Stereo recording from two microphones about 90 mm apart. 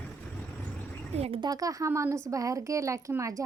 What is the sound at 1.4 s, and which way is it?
Speech, 40° right (ahead or behind).